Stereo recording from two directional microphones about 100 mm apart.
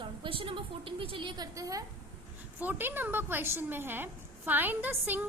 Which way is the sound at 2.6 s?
20° right (ahead or behind).